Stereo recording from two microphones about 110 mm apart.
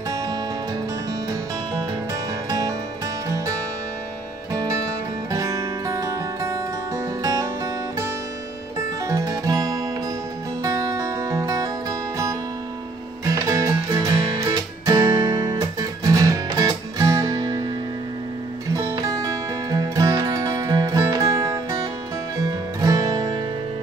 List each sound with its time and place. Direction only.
3.3 s music: 30° right (ahead or behind)
5.3 s music: 30° right (ahead or behind)
9.0 s music: 30° right (ahead or behind)
13.2 s music: 30° right (ahead or behind)
14.9 s guitar: 35° right (ahead or behind)
16.5 s music: 30° right (ahead or behind)
18.9 s music: 30° right (ahead or behind)